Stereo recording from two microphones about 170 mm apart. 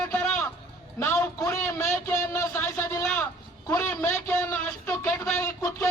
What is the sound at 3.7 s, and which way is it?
A man's voice, 15° left (ahead or behind).